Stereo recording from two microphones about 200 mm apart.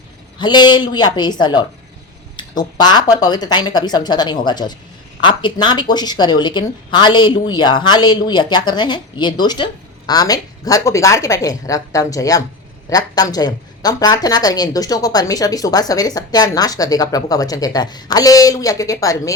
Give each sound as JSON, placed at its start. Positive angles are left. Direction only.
{"t": 0.3, "sound": "a woman's voice", "side_deg": 20}